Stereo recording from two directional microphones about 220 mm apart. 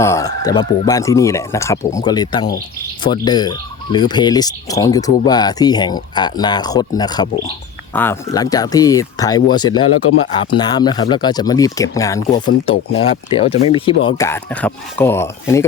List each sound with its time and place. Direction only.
0.0 s speech: 15° left (ahead or behind)
13.0 s speech: 25° left (ahead or behind)